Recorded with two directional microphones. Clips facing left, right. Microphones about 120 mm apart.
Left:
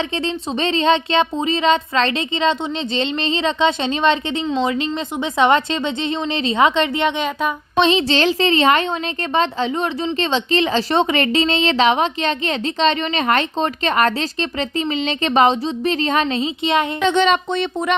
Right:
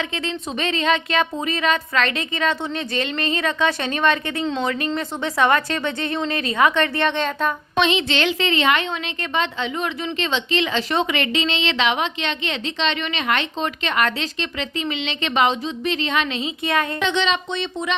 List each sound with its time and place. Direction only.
0.3 s speech: 30° left (ahead or behind); by 7.5 s 15° left (ahead or behind)
7.8 s a woman's voice: 35° left (ahead or behind)
17.0 s speech: 45° left (ahead or behind)